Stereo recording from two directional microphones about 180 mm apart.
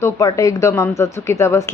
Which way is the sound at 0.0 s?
15° left (ahead or behind).